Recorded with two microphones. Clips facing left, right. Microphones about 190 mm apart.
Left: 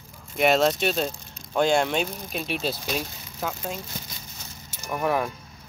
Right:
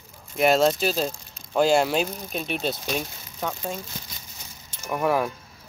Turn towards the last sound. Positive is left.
turn(degrees=0)  # may be behind; listen again after turning